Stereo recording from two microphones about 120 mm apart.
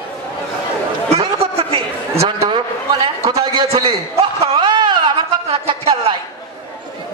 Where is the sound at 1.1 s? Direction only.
55° right (ahead or behind).